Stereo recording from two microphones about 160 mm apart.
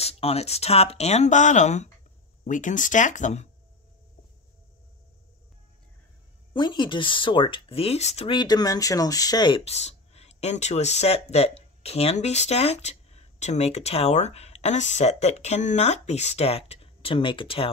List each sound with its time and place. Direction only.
0.0 s speech: 40° left (ahead or behind)
6.5 s speech: 30° left (ahead or behind)
8.4 s speech: 25° left (ahead or behind)
9.7 s speech: 40° left (ahead or behind)